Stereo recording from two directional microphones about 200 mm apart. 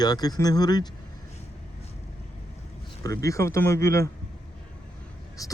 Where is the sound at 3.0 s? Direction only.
15° left (ahead or behind).